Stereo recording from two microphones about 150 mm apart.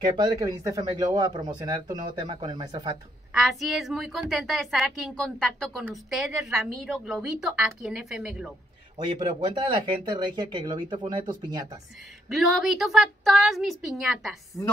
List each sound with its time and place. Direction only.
0.2 s speech: 25° right (ahead or behind)
3.3 s a woman's voice: centre (ahead or behind)
8.9 s speech: 35° right (ahead or behind)
12.3 s a woman's voice: centre (ahead or behind)